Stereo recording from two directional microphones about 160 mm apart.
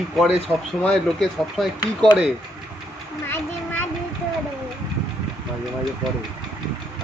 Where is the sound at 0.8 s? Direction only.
5° left (ahead or behind).